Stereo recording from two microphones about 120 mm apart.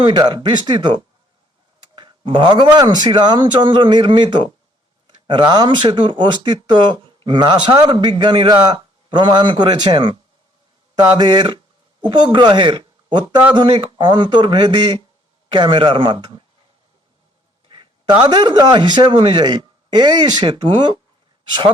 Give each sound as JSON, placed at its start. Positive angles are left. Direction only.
{"t": 0.0, "sound": "speech", "side_deg": -40}
{"t": 11.2, "sound": "speech", "side_deg": -40}
{"t": 17.7, "sound": "a man's voice", "side_deg": -40}